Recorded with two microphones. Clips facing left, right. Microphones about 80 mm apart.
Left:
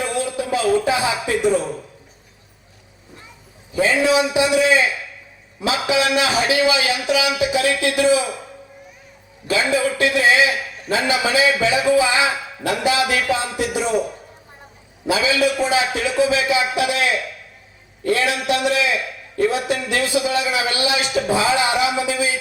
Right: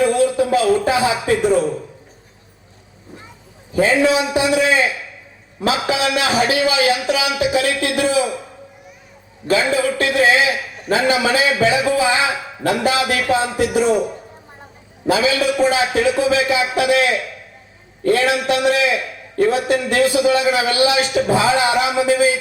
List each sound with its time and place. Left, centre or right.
0.1 s music: right
3.7 s a man's voice: right
9.5 s a man's voice: right
15.0 s a man's voice: right